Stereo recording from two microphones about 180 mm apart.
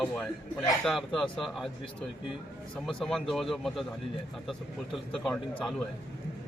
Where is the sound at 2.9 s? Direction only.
Centre (ahead or behind).